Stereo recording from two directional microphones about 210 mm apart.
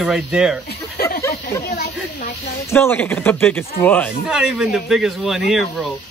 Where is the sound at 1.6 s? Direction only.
45° left (ahead or behind).